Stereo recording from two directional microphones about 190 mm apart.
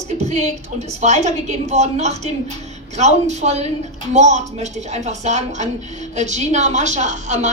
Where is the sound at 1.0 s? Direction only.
35° right (ahead or behind).